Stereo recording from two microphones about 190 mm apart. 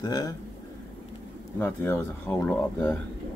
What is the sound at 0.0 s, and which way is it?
Speech, 20° left (ahead or behind).